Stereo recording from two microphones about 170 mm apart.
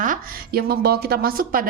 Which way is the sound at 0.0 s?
55° right (ahead or behind).